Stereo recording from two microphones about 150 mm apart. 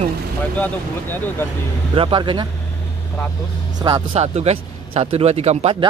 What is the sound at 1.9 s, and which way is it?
Speech, 35° right (ahead or behind).